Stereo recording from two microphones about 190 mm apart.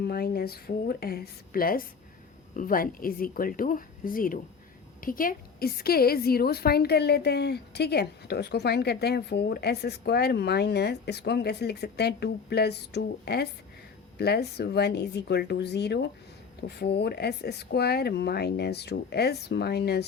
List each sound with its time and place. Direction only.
0.0 s a woman's voice: 55° left (ahead or behind)